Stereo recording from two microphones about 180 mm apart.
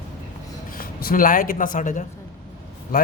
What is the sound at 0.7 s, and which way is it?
Speech, 55° left (ahead or behind).